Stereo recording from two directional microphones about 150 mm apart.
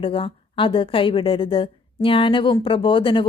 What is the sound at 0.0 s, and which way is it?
Speech, 35° left (ahead or behind).